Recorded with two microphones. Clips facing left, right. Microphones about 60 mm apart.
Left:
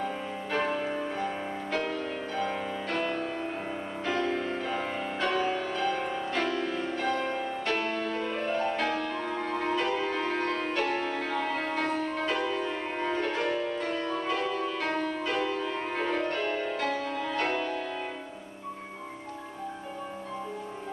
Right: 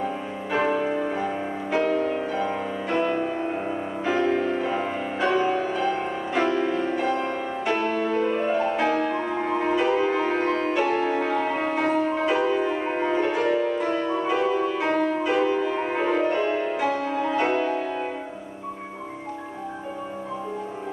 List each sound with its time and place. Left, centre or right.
0.0 s music: centre